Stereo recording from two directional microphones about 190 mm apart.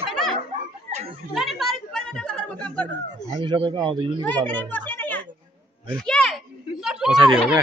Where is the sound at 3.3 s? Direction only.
25° right (ahead or behind).